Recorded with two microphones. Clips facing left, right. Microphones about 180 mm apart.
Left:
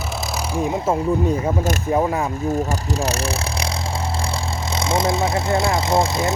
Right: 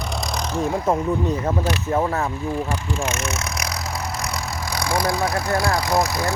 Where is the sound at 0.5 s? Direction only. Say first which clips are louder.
Left 1 dB; 5° left (ahead or behind).